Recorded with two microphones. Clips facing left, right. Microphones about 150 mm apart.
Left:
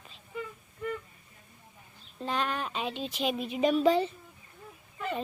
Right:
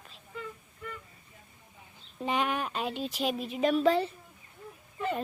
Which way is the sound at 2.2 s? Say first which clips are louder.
Right 2 dB; 15° right (ahead or behind).